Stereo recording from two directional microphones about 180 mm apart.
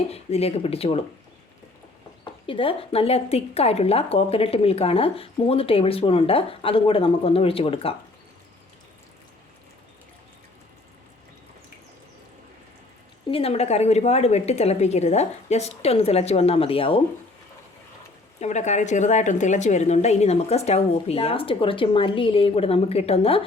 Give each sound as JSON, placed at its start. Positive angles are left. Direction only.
{"t": 0.1, "sound": "a woman's voice", "side_deg": 35}
{"t": 2.2, "sound": "a woman's voice", "side_deg": 30}
{"t": 13.2, "sound": "a woman's voice", "side_deg": 30}
{"t": 18.3, "sound": "a woman's voice", "side_deg": 40}